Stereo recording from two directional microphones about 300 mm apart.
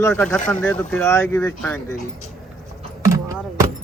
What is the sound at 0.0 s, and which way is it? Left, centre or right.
Speech, centre.